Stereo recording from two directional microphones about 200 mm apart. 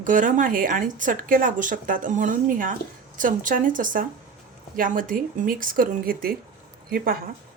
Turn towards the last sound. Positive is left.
turn(degrees=-45)  # may be behind; listen again after turning